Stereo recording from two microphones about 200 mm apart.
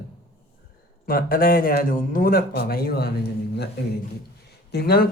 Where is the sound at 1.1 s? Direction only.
45° left (ahead or behind).